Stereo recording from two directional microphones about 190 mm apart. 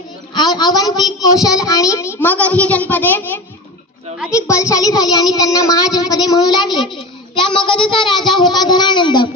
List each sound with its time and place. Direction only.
0.3 s a child's voice: 20° left (ahead or behind)